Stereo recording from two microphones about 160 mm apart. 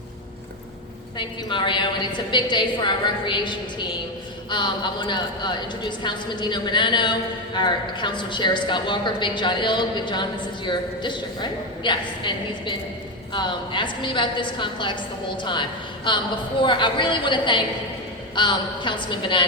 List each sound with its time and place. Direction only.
1.2 s a woman's voice: 30° left (ahead or behind)